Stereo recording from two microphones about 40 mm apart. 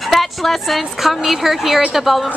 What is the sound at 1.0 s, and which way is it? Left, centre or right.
Speech, centre.